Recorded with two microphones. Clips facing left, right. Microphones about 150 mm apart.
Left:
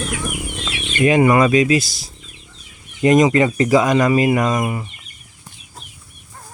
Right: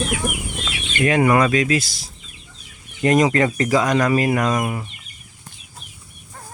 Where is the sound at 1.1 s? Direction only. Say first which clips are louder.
Left 2 dB; 5° left (ahead or behind).